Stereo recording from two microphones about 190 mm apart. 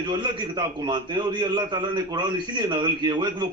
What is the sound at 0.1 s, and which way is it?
A man's voice, 25° right (ahead or behind).